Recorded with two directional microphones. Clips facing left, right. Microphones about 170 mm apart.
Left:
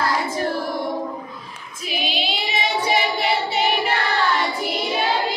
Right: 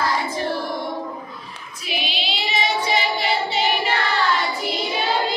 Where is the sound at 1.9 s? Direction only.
50° left (ahead or behind).